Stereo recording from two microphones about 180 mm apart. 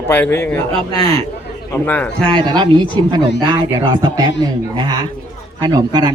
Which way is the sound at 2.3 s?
25° right (ahead or behind).